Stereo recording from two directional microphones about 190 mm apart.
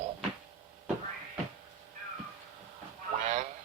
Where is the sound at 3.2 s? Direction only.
40° right (ahead or behind).